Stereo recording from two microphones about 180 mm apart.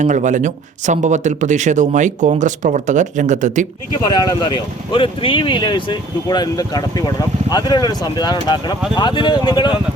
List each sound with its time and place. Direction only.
0.0 s speech: 45° right (ahead or behind)
4.0 s speech: 25° left (ahead or behind)